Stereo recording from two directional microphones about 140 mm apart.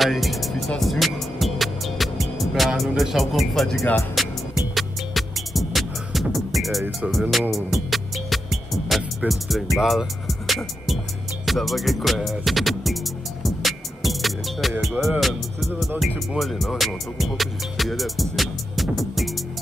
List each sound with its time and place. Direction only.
0.0 s speech: centre (ahead or behind)
4.7 s music: centre (ahead or behind)
9.3 s speech: centre (ahead or behind)
11.4 s music: centre (ahead or behind)